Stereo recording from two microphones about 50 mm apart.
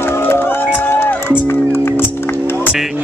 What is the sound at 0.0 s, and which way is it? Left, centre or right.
Music, left.